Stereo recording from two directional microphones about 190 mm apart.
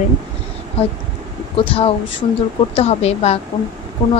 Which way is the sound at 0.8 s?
30° left (ahead or behind).